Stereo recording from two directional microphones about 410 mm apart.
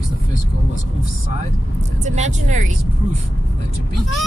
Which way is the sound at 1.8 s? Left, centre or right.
Centre.